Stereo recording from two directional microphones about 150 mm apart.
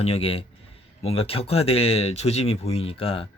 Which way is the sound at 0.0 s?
40° left (ahead or behind).